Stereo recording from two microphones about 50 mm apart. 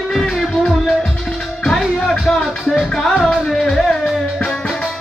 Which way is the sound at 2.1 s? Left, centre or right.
Centre.